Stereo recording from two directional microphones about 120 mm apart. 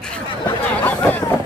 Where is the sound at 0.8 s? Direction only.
15° left (ahead or behind).